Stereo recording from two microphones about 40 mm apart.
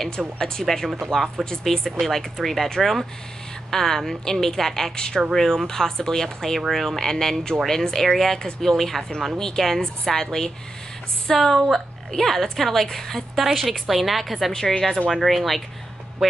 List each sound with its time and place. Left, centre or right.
0.4 s a woman's voice: centre
14.5 s a woman's voice: centre
15.1 s a woman's voice: centre